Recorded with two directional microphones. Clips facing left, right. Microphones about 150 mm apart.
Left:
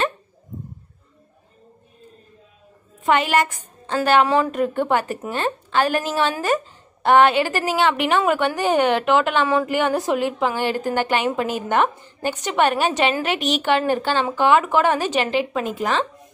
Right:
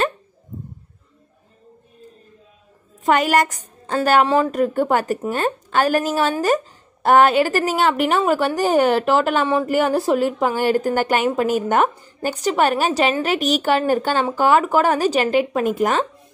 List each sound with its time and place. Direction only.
3.0 s a woman's voice: 40° right (ahead or behind)